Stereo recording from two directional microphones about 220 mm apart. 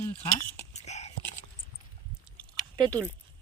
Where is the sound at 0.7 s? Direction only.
30° left (ahead or behind).